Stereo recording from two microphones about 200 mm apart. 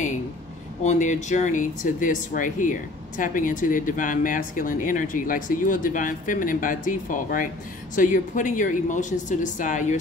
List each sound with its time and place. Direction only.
0.8 s speech: 35° left (ahead or behind)